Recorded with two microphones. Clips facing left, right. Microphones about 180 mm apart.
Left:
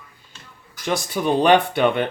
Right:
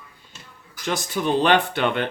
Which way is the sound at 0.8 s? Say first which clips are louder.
Left 2 dB; 15° left (ahead or behind).